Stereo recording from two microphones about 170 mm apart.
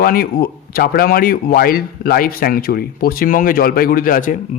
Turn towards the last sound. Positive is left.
turn(degrees=55)  # may be behind; listen again after turning